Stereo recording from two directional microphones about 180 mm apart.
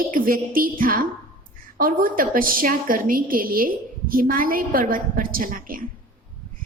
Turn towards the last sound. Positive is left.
turn(degrees=-50)  # may be behind; listen again after turning